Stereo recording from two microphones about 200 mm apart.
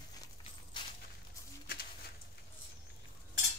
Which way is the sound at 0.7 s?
20° left (ahead or behind).